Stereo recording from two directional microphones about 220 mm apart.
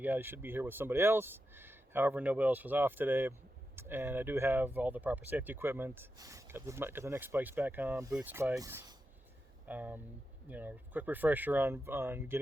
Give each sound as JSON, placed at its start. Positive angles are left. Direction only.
{"t": 0.0, "sound": "speech", "side_deg": -10}